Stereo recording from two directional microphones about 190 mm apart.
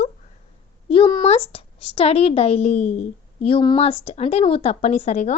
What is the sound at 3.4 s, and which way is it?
Speech, 25° left (ahead or behind).